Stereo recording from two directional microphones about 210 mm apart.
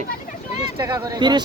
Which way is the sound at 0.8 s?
20° right (ahead or behind).